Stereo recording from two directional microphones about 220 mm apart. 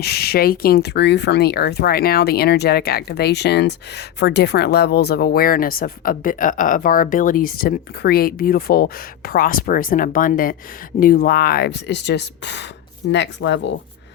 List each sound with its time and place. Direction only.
0.0 s speech: 45° left (ahead or behind)